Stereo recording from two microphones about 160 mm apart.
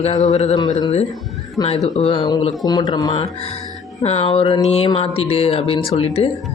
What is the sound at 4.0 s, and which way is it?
Speech, 40° left (ahead or behind).